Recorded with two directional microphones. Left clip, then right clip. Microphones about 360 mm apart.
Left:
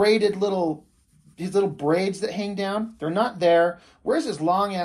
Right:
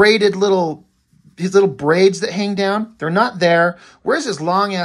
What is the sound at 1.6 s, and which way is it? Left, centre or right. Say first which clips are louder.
Speech: right 8 dB; right.